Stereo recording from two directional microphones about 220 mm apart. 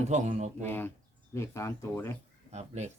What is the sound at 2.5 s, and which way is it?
Speech, 30° right (ahead or behind).